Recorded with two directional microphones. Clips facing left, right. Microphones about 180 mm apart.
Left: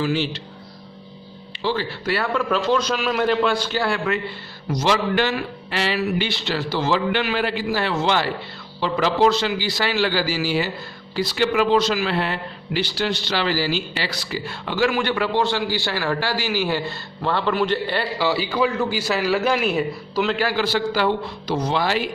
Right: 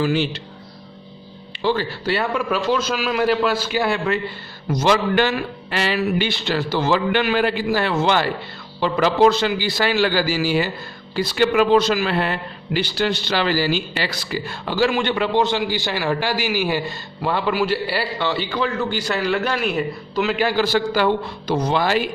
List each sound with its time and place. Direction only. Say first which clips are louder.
0.0 s speech: right 2 dB; 55° right (ahead or behind)
1.5 s music: right 3 dB; 55° right (ahead or behind)
2.3 s a man's voice: even; 10° right (ahead or behind)
3.8 s a man's voice: right 2 dB; 20° right (ahead or behind)
4.7 s speech: right 3 dB; 50° right (ahead or behind)
14.6 s a man's voice: right 1 dB; 35° right (ahead or behind); by 18.1 s 5° right (ahead or behind)
18.2 s a man's voice: left 4 dB; 5° left (ahead or behind)
20.3 s a man's voice: right 2 dB; 20° right (ahead or behind)
20.6 s speech: right 2 dB; 50° right (ahead or behind)